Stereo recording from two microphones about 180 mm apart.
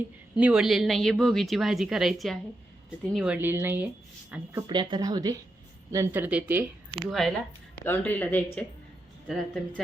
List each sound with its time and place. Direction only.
0.3 s a woman's voice: 5° right (ahead or behind)
4.6 s a woman's voice: 25° right (ahead or behind); by 8.4 s 10° left (ahead or behind)
9.2 s a woman's voice: centre (ahead or behind)